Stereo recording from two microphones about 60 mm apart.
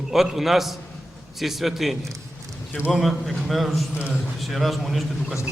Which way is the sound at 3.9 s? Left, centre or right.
Centre.